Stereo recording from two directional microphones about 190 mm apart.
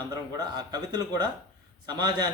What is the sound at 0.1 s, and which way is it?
A man's voice, 20° right (ahead or behind).